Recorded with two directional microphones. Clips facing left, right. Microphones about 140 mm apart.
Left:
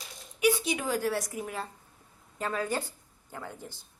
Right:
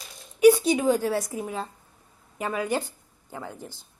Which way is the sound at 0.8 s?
20° right (ahead or behind).